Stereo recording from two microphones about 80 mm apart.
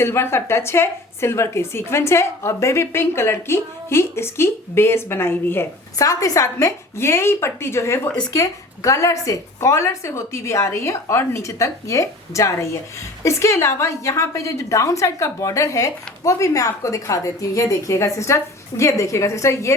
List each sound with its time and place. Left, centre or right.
0.0 s a woman's voice: left
6.0 s a woman's voice: left